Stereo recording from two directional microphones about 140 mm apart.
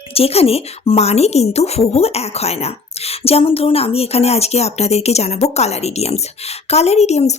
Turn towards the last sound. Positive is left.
turn(degrees=50)  # may be behind; listen again after turning